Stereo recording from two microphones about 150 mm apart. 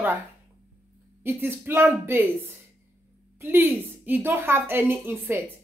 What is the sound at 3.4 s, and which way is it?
A woman's voice, 15° right (ahead or behind).